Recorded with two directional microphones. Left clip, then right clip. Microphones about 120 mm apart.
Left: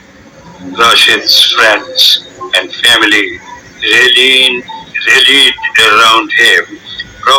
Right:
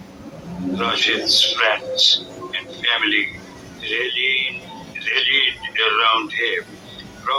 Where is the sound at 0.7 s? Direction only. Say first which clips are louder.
Left 14 dB; 65° left (ahead or behind).